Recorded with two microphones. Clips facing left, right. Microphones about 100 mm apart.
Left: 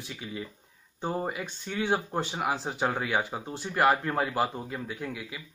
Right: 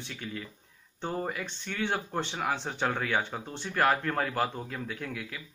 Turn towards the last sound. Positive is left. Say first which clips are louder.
# left 1 dB
turn(degrees=5)  # may be behind; listen again after turning